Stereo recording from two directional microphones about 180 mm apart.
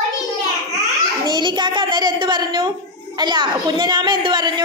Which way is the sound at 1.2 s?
25° right (ahead or behind).